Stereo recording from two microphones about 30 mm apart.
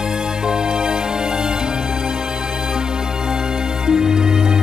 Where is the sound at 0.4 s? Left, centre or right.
Right.